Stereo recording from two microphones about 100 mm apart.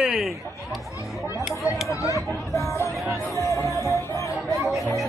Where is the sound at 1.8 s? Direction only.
35° left (ahead or behind).